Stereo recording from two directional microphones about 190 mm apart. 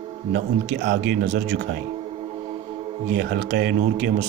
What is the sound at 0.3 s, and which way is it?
Speech, 65° right (ahead or behind).